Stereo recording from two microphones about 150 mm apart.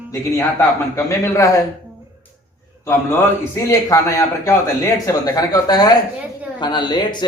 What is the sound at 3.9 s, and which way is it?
Speech, 20° left (ahead or behind).